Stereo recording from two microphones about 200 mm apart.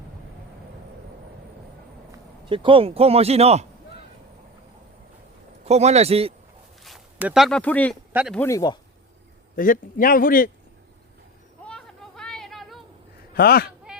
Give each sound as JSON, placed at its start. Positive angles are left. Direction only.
{"t": 2.5, "sound": "speech", "side_deg": -25}
{"t": 5.6, "sound": "a man's voice", "side_deg": -35}
{"t": 6.8, "sound": "speech", "side_deg": -5}
{"t": 8.1, "sound": "speech", "side_deg": -5}
{"t": 8.4, "sound": "speech", "side_deg": 15}
{"t": 9.6, "sound": "a man's voice", "side_deg": 45}
{"t": 11.6, "sound": "a sound", "side_deg": 5}
{"t": 13.3, "sound": "a man's voice", "side_deg": 50}